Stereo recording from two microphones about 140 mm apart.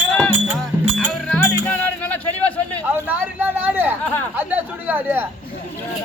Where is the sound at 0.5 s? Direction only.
5° left (ahead or behind).